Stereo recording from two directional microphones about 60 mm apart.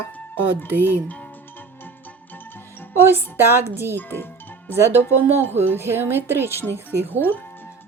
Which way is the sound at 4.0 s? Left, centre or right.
Left.